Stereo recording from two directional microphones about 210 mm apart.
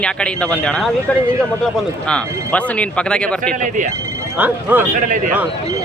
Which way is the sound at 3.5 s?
35° right (ahead or behind).